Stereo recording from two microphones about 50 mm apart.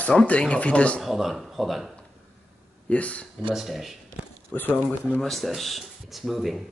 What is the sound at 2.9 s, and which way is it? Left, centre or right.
Speech, left.